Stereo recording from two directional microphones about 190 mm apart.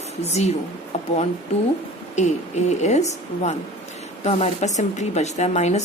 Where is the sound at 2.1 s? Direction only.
35° left (ahead or behind).